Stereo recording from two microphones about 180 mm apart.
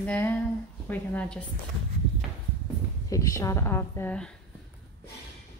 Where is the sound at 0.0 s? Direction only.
10° left (ahead or behind).